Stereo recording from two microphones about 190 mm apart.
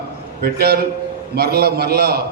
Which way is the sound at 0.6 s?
55° right (ahead or behind).